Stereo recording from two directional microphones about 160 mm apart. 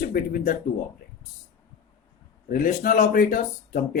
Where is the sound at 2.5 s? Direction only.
60° left (ahead or behind).